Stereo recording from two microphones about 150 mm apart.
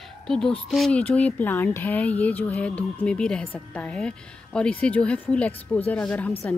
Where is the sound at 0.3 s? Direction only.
5° left (ahead or behind).